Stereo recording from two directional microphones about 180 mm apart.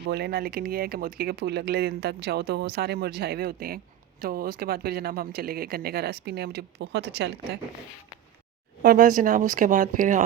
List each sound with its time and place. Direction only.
0.1 s speech: 60° right (ahead or behind)
8.8 s speech: 50° right (ahead or behind)